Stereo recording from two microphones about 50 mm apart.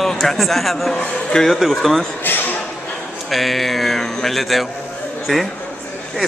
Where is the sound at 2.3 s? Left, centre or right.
Left.